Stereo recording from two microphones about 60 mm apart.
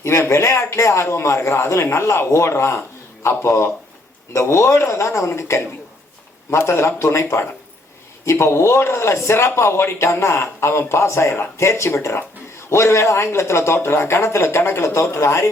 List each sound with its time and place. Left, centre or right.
0.0 s a man's voice: left